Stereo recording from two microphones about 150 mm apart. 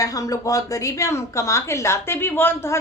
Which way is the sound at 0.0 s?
25° left (ahead or behind).